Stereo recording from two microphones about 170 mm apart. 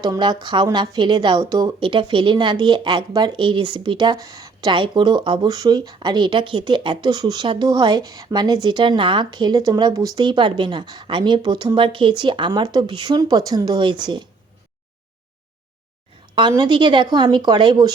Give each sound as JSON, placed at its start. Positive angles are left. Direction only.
{"t": 0.0, "sound": "a woman's voice", "side_deg": -25}
{"t": 16.3, "sound": "a woman's voice", "side_deg": -25}